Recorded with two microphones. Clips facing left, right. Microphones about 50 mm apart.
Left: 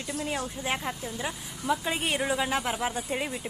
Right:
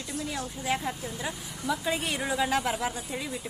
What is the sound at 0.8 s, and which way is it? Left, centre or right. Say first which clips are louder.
Speech: even; centre.